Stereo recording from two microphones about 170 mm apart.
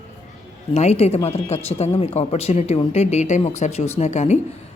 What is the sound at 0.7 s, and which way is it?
Speech, 40° left (ahead or behind).